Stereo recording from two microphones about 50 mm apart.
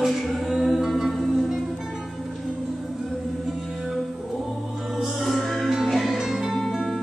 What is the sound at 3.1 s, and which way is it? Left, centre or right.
Music, centre.